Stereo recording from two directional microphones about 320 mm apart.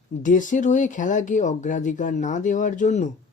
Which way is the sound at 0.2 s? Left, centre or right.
Left.